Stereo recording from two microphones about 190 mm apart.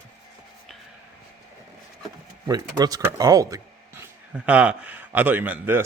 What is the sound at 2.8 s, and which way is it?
Speech, 20° right (ahead or behind).